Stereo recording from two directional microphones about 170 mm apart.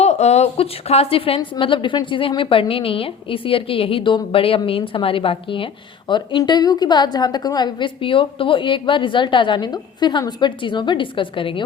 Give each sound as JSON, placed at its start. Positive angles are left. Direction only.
{"t": 0.0, "sound": "a woman's voice", "side_deg": 40}